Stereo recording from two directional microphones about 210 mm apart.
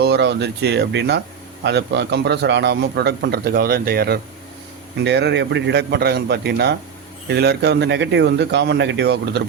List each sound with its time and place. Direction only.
0.0 s a man's voice: 55° right (ahead or behind)